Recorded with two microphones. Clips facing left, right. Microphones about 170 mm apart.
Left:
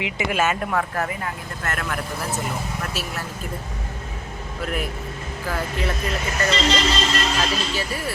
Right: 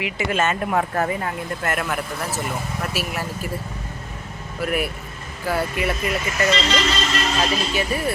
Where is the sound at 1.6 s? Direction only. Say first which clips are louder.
Right 2 dB; 10° right (ahead or behind).